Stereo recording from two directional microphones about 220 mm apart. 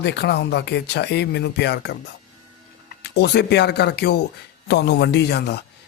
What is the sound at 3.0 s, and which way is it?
Speech, 50° left (ahead or behind).